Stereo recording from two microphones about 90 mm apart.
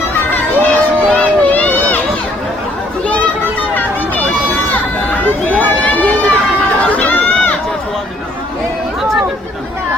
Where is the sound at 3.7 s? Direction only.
20° left (ahead or behind).